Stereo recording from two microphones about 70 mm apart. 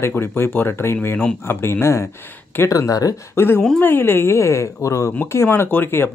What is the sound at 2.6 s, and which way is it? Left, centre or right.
Speech, left.